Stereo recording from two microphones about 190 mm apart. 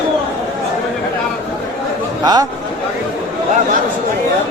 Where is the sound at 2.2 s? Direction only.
20° right (ahead or behind).